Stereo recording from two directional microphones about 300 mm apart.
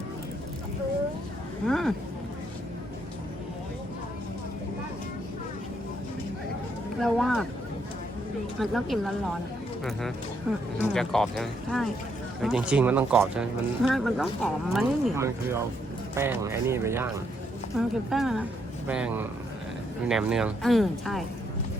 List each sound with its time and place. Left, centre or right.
1.6 s speech: centre
7.0 s speech: centre
8.5 s speech: centre
10.8 s speech: centre